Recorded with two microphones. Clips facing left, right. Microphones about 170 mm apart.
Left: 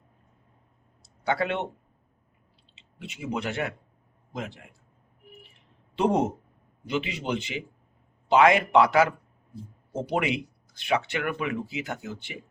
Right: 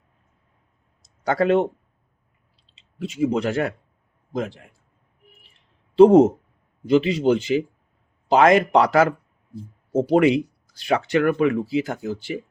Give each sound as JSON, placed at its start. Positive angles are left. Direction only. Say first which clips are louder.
{"t": 1.2, "sound": "speech", "louder": "right 9 dB", "side_deg": -40}
{"t": 2.7, "sound": "speech", "louder": "right 14 dB", "side_deg": -35}
{"t": 6.0, "sound": "speech", "louder": "right 12 dB", "side_deg": -35}